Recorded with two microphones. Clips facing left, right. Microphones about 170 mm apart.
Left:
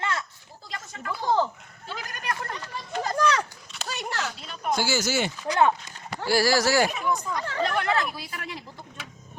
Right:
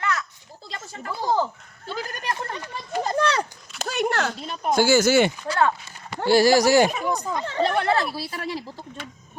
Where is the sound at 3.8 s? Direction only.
55° right (ahead or behind).